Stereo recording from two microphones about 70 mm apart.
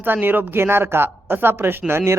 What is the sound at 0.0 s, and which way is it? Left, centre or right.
Speech, right.